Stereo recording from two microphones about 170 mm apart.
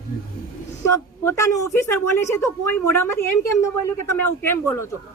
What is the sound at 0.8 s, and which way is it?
Speech, 15° left (ahead or behind).